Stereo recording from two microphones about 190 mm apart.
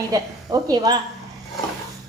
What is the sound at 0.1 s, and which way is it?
Speech, 20° right (ahead or behind).